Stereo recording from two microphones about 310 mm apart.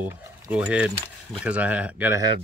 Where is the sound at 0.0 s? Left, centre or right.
Centre.